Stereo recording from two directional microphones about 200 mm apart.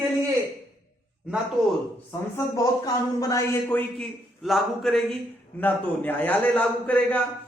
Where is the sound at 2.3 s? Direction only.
20° left (ahead or behind).